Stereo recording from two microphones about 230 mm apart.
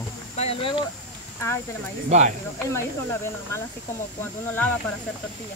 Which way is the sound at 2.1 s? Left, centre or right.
Right.